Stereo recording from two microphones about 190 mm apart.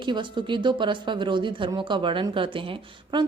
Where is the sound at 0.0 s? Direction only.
25° right (ahead or behind).